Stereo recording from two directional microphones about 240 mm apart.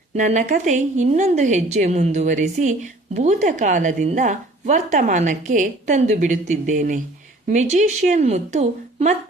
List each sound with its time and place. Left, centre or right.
0.2 s a woman's voice: right